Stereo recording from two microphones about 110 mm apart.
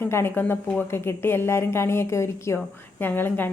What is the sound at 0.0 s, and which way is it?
A woman's voice, 20° left (ahead or behind).